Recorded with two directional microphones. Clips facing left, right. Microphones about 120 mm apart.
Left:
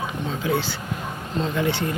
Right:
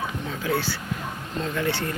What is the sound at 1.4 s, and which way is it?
Speech, 20° left (ahead or behind).